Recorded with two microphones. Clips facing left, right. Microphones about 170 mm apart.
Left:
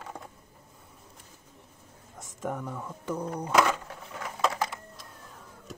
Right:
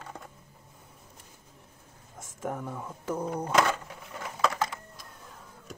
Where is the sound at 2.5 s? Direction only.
15° right (ahead or behind).